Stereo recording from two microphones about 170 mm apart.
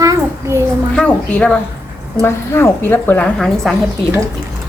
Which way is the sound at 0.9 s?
5° left (ahead or behind).